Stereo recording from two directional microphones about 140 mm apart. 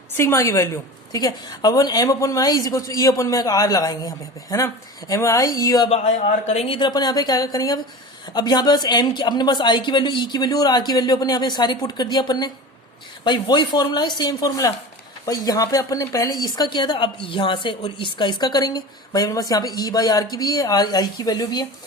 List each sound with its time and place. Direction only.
0.2 s a woman's voice: 20° left (ahead or behind)
5.9 s speech: 55° left (ahead or behind)
6.7 s a woman's voice: 30° left (ahead or behind)